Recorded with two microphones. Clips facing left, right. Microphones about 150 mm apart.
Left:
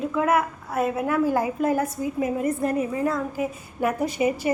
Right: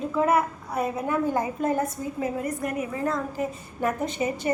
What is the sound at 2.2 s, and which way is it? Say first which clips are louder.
Speech: left 4 dB; 20° left (ahead or behind).